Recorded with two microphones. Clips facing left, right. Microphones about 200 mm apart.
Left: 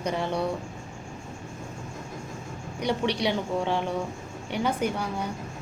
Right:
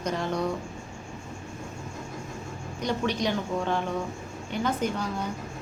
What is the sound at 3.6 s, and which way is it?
A woman's voice, 15° left (ahead or behind).